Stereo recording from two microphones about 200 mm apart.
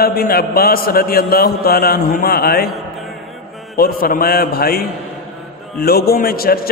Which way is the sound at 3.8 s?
45° left (ahead or behind).